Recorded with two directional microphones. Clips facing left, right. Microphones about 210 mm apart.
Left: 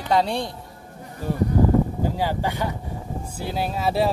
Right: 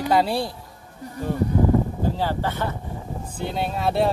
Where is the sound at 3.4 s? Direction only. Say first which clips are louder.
Even; centre (ahead or behind).